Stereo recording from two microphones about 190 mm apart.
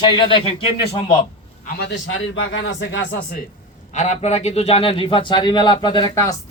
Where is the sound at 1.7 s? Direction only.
70° left (ahead or behind).